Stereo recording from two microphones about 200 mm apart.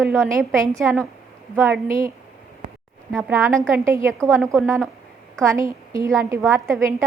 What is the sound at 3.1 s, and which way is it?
A woman's voice, 5° right (ahead or behind).